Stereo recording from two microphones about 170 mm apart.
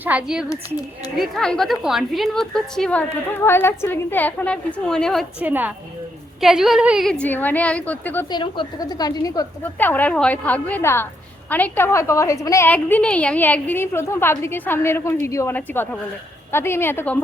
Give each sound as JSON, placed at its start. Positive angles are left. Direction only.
{"t": 0.0, "sound": "a woman's voice", "side_deg": -5}
{"t": 5.4, "sound": "a woman's voice", "side_deg": -10}
{"t": 8.3, "sound": "a woman's voice", "side_deg": 25}
{"t": 9.7, "sound": "a woman's voice", "side_deg": 10}